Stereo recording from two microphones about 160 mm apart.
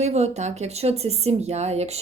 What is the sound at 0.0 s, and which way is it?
A woman's voice, 45° right (ahead or behind).